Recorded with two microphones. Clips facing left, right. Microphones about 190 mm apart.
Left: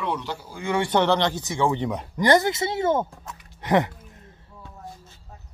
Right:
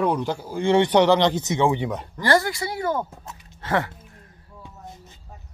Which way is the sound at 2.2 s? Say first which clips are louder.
Left 2 dB; 20° left (ahead or behind).